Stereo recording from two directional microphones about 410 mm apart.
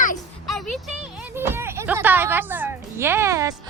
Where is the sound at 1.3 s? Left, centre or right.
Centre.